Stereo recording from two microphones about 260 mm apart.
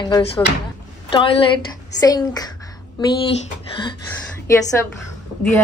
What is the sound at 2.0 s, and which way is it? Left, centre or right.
Speech, centre.